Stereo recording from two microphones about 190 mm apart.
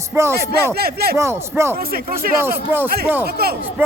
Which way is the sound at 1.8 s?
50° right (ahead or behind).